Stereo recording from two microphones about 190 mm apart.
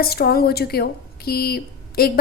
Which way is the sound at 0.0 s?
55° left (ahead or behind).